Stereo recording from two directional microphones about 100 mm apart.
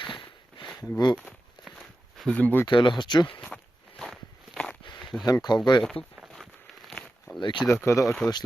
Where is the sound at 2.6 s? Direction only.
50° left (ahead or behind).